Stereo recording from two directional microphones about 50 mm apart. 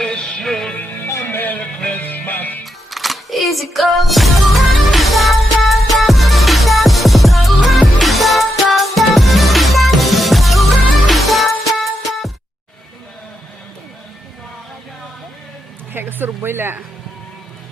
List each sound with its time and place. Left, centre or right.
0.0 s music: centre
0.8 s music: left
2.9 s music: centre
15.9 s music: right